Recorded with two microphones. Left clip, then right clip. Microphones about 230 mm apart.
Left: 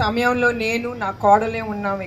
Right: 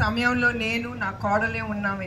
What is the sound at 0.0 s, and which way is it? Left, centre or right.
A man's voice, left.